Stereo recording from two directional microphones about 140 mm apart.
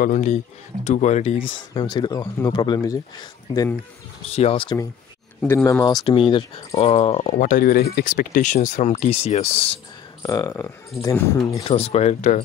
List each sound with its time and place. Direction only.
0.0 s a man's voice: 60° left (ahead or behind)
1.7 s speech: 30° left (ahead or behind)
4.3 s speech: 45° left (ahead or behind)
5.5 s speech: 15° left (ahead or behind)
5.9 s speech: 40° left (ahead or behind)
7.3 s speech: 70° left (ahead or behind); by 9.8 s 45° left (ahead or behind)
10.2 s speech: 25° left (ahead or behind)
11.6 s speech: 45° left (ahead or behind)